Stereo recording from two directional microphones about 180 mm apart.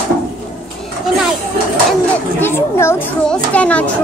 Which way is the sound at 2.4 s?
15° left (ahead or behind).